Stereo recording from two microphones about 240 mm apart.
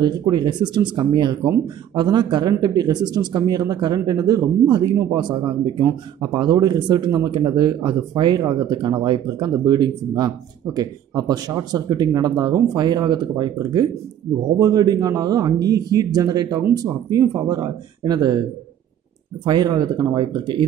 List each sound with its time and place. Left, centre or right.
0.0 s speech: centre
19.4 s speech: centre